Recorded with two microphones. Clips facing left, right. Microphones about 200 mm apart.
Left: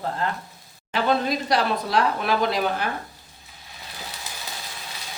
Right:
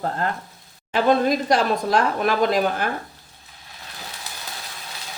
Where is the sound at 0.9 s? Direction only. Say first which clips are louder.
Right 4 dB; 50° right (ahead or behind).